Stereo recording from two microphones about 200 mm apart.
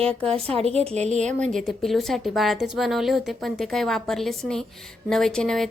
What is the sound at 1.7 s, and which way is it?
A woman's voice, centre (ahead or behind).